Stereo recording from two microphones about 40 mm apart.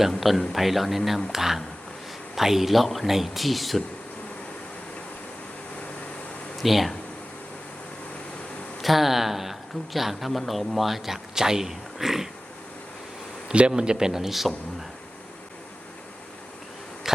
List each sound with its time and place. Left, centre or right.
0.2 s speech: centre
6.6 s speech: centre
8.8 s speech: centre
13.5 s a man's voice: right; by 14.5 s centre